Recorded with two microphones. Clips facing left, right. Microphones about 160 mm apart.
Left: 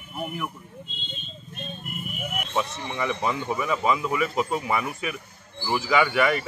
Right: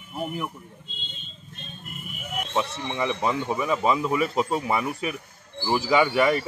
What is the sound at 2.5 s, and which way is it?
Speech, 25° right (ahead or behind).